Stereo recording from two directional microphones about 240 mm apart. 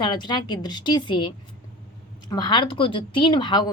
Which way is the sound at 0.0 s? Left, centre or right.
Centre.